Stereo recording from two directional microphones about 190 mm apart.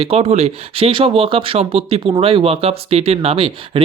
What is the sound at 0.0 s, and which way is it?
Speech, 30° right (ahead or behind).